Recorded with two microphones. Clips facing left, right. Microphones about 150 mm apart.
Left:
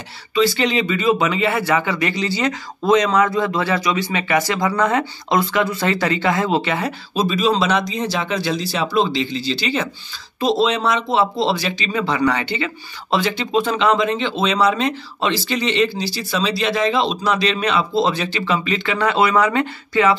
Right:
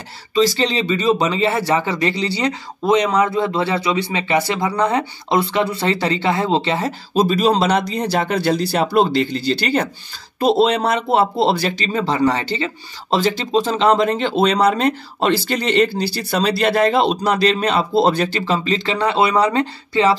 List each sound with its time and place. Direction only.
0.6 s speech: 30° right (ahead or behind)
7.2 s speech: 45° right (ahead or behind)
8.1 s a man's voice: 50° right (ahead or behind); by 20.2 s 30° right (ahead or behind)